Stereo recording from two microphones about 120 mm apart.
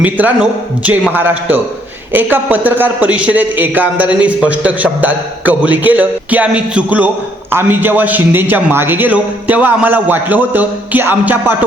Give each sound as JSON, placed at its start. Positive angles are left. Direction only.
{"t": 0.0, "sound": "a man's voice", "side_deg": -15}